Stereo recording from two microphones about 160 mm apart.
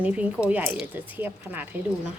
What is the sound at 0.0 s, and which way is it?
Speech, 10° right (ahead or behind).